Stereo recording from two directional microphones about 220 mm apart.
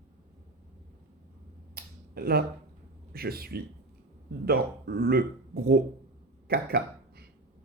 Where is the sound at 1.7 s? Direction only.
45° right (ahead or behind).